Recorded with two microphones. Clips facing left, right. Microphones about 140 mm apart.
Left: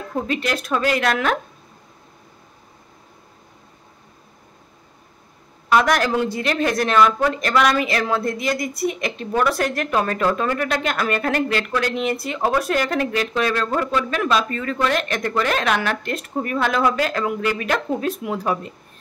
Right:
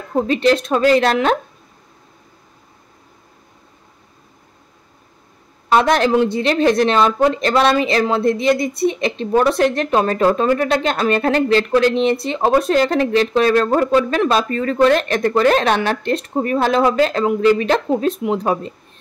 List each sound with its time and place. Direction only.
0.1 s speech: 30° right (ahead or behind)
5.7 s speech: 25° right (ahead or behind)